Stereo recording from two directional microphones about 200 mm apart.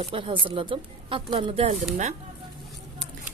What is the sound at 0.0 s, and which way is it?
A woman's voice, 25° right (ahead or behind).